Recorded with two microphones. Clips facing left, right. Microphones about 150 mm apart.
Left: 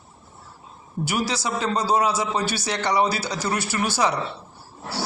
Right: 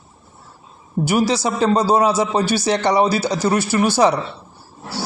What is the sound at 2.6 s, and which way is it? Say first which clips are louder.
Speech: right 6 dB; 25° right (ahead or behind).